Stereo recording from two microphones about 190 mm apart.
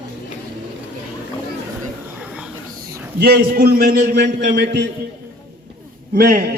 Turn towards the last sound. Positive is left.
turn(degrees=-50)  # may be behind; listen again after turning